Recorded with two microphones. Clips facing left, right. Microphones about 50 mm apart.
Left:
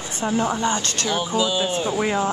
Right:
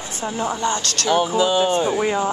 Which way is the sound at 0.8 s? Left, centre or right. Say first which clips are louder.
Right 1 dB; left.